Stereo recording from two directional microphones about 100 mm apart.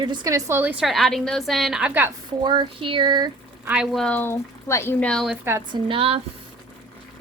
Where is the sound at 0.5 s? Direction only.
20° right (ahead or behind).